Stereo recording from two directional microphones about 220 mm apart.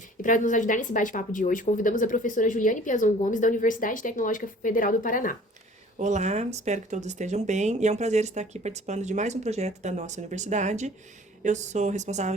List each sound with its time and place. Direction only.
0.2 s a woman's voice: 35° left (ahead or behind)
6.0 s speech: 30° right (ahead or behind)